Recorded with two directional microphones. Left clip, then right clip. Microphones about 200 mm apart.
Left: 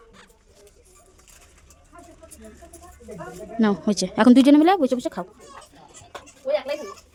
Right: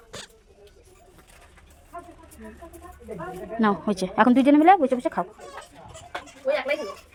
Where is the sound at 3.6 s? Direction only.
30° left (ahead or behind).